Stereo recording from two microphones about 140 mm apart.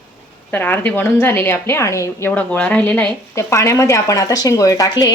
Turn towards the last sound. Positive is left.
turn(degrees=25)  # may be behind; listen again after turning